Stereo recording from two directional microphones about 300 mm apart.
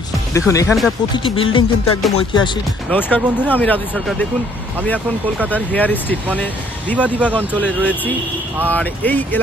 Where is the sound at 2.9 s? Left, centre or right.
Centre.